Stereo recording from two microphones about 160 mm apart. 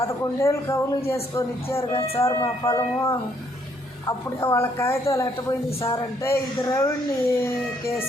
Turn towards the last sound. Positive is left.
turn(degrees=20)  # may be behind; listen again after turning